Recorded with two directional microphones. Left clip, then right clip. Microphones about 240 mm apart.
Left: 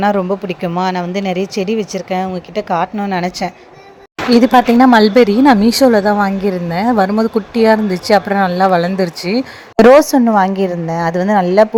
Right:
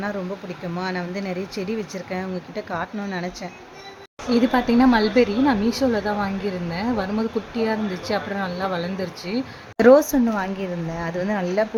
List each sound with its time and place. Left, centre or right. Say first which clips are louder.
0.0 s speech: left 14 dB; left